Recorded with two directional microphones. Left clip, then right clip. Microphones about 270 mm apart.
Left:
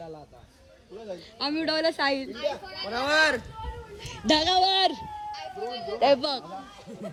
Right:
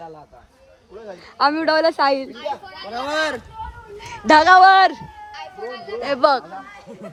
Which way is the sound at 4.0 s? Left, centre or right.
Centre.